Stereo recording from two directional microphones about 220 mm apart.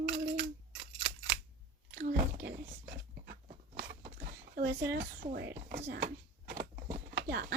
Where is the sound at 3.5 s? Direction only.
40° right (ahead or behind).